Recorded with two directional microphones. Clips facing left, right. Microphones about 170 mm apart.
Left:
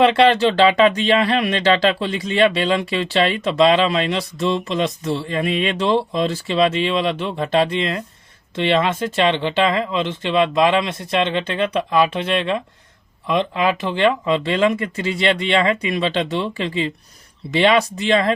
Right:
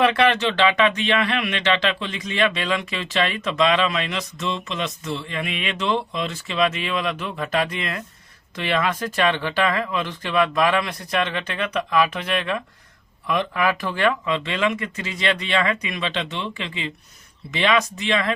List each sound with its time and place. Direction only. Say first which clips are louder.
0.0 s speech: left 5 dB; 30° left (ahead or behind)